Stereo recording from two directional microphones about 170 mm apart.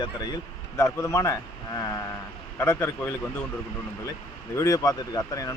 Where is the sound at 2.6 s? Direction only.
15° left (ahead or behind).